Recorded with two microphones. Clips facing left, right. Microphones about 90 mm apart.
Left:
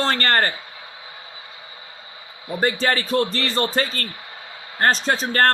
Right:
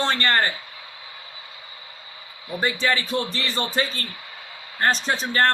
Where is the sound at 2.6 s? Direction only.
40° left (ahead or behind).